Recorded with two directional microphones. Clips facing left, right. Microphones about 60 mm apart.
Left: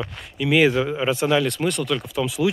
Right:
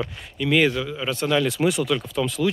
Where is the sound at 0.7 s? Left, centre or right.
Left.